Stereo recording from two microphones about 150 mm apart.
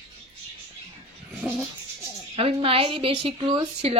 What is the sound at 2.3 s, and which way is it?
Speech, 40° right (ahead or behind).